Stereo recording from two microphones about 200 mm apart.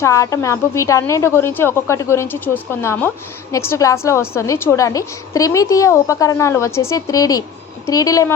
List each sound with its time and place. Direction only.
0.0 s a woman's voice: 15° left (ahead or behind)